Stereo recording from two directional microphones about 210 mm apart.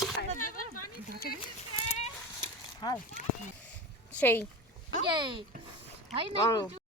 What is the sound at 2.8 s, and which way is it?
Speech, 20° left (ahead or behind).